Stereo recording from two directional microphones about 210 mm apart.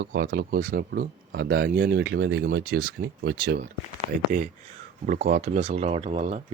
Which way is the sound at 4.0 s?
35° right (ahead or behind).